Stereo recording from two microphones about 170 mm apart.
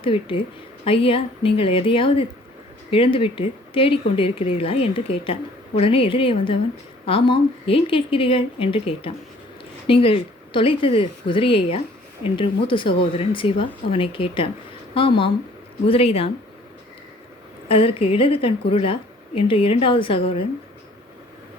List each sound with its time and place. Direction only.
0.0 s speech: 30° left (ahead or behind)
17.7 s speech: 35° left (ahead or behind)